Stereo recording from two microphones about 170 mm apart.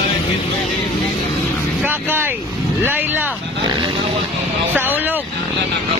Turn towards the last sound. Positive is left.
turn(degrees=-10)  # may be behind; listen again after turning